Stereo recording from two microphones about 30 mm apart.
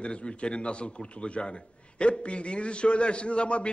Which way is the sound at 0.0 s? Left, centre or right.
Left.